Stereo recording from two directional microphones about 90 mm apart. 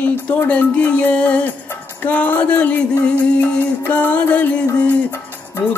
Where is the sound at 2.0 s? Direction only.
20° left (ahead or behind).